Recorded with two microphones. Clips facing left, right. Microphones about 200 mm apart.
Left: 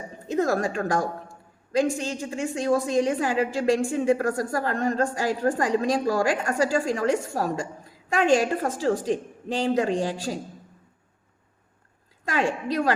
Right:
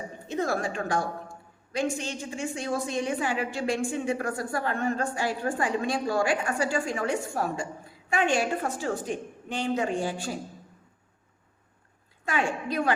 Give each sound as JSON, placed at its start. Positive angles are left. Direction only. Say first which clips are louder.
{"t": 0.3, "sound": "a woman's voice", "louder": "left 5 dB", "side_deg": 40}
{"t": 12.3, "sound": "a woman's voice", "louder": "left 3 dB", "side_deg": 35}